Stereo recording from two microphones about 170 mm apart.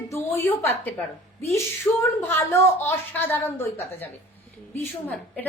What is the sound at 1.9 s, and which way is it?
A woman's voice, 15° left (ahead or behind).